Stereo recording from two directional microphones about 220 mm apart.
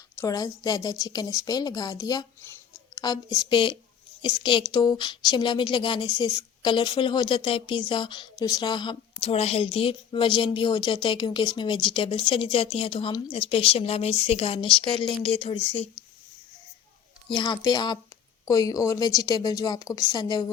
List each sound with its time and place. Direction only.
0.2 s a woman's voice: 15° left (ahead or behind)
17.2 s a woman's voice: 20° left (ahead or behind)